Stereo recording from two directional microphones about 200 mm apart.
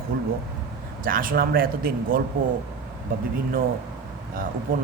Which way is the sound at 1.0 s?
45° right (ahead or behind).